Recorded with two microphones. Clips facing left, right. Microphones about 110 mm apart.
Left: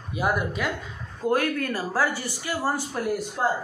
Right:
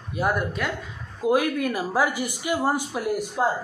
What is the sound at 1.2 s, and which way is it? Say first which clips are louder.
Speech: right 2 dB; 10° right (ahead or behind).